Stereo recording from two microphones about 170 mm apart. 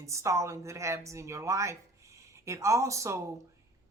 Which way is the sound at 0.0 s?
15° right (ahead or behind).